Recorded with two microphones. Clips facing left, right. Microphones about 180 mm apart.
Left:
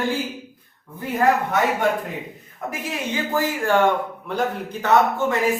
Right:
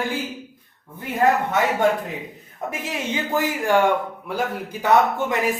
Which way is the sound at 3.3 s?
15° right (ahead or behind).